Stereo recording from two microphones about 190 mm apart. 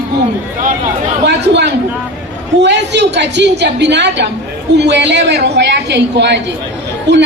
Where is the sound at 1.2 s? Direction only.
65° right (ahead or behind).